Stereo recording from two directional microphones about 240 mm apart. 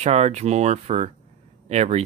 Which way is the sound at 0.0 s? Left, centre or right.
Right.